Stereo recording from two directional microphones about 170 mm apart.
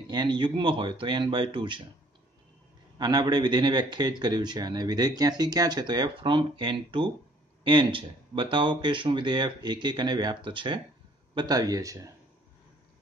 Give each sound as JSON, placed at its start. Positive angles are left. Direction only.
{"t": 0.0, "sound": "speech", "side_deg": -25}
{"t": 3.0, "sound": "speech", "side_deg": -25}